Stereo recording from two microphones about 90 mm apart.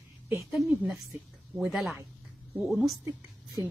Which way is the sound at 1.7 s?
Centre (ahead or behind).